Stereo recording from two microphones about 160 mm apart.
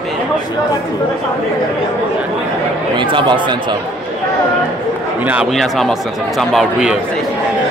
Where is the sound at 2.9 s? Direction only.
30° right (ahead or behind).